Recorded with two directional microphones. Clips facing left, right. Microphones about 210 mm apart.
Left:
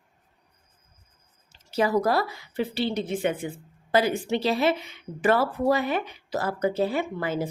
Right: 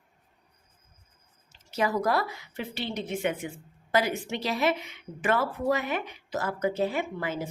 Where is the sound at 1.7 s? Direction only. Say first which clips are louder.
Left 4 dB; 35° left (ahead or behind).